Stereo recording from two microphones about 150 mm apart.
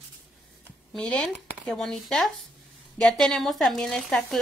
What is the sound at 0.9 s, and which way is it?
A child's voice, 5° left (ahead or behind).